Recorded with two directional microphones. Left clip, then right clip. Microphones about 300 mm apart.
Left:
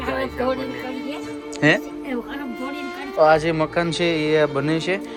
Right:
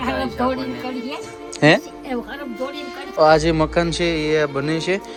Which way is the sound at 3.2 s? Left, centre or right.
Centre.